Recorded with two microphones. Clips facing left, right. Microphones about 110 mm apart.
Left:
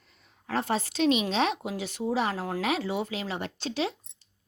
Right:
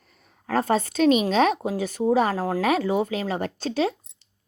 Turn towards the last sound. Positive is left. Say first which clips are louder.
# right 6 dB
turn(degrees=-45)  # may be behind; listen again after turning